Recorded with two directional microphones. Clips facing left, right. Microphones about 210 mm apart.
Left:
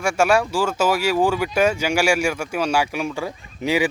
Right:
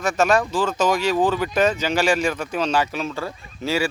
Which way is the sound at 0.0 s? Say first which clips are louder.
Left 1 dB; 10° left (ahead or behind).